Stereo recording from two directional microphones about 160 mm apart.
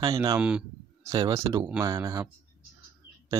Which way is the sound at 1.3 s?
20° right (ahead or behind).